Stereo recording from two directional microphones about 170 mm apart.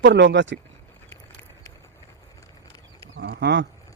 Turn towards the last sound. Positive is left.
turn(degrees=-90)